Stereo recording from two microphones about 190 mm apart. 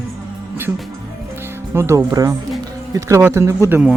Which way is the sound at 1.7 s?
15° right (ahead or behind).